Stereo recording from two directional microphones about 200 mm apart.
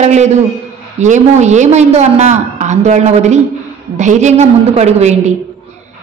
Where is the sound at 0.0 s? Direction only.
35° right (ahead or behind).